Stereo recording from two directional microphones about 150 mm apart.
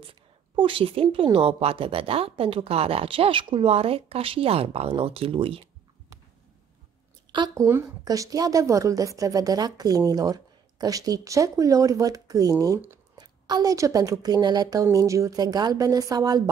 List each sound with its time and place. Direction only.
0.6 s a woman's voice: 35° right (ahead or behind)
7.3 s a woman's voice: 25° right (ahead or behind)